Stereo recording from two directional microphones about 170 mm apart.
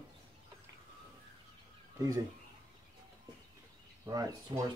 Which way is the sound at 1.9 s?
20° right (ahead or behind).